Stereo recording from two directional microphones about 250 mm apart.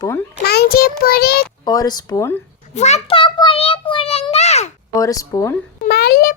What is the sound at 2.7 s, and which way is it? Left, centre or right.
A child's voice, left.